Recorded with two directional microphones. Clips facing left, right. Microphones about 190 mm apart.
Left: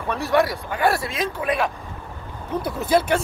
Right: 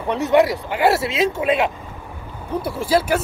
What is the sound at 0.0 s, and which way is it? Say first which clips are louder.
Speech: right 4 dB; 20° right (ahead or behind).